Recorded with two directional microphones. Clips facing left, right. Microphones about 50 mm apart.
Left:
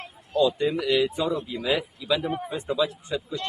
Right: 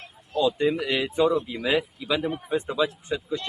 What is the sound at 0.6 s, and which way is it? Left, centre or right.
Speech, right.